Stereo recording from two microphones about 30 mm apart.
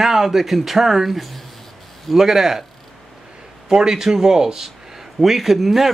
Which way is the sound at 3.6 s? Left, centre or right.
Right.